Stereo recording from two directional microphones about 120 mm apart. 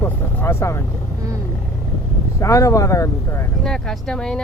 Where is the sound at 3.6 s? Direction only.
5° left (ahead or behind).